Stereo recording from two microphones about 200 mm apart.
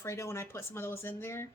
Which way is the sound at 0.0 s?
15° left (ahead or behind).